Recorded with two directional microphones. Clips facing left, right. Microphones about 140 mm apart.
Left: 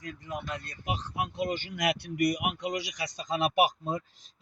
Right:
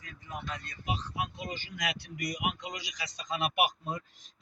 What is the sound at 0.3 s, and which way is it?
Speech, 70° left (ahead or behind).